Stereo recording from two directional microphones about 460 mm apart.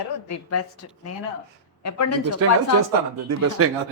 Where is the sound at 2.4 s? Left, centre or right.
Right.